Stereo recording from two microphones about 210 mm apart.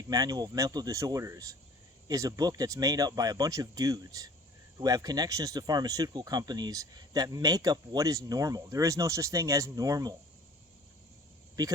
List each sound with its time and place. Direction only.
0.1 s speech: 15° right (ahead or behind)
11.6 s speech: 15° right (ahead or behind)